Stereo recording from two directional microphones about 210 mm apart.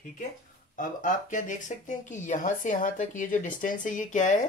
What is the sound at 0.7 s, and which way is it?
Speech, 40° left (ahead or behind).